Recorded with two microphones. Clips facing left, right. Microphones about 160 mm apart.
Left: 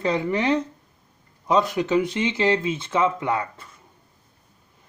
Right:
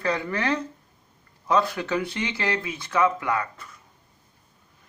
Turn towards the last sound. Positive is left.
turn(degrees=25)  # may be behind; listen again after turning